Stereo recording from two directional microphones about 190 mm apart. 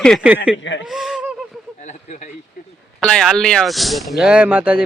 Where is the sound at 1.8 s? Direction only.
40° left (ahead or behind).